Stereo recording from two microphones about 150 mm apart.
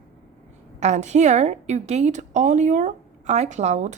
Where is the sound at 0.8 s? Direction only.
50° right (ahead or behind).